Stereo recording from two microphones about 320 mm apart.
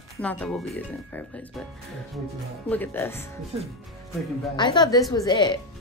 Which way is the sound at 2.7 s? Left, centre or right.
Centre.